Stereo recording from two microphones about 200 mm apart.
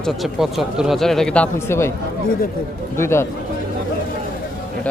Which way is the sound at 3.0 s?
15° left (ahead or behind).